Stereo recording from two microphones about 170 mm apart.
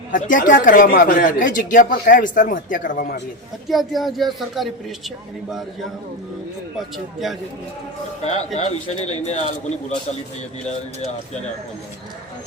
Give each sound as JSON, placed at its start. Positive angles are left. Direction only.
{"t": 0.1, "sound": "speech", "side_deg": 50}
{"t": 3.7, "sound": "a woman's voice", "side_deg": 0}
{"t": 6.7, "sound": "a woman's voice", "side_deg": 0}
{"t": 8.5, "sound": "a man's voice", "side_deg": 40}